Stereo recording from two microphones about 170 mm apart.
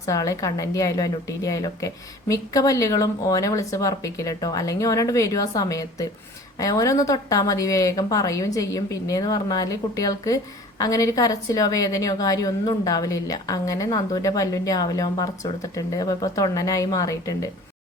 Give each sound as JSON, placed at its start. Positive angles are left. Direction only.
{"t": 0.0, "sound": "a woman's voice", "side_deg": 20}